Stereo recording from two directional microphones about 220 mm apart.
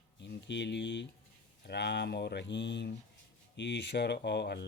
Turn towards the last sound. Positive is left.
turn(degrees=50)  # may be behind; listen again after turning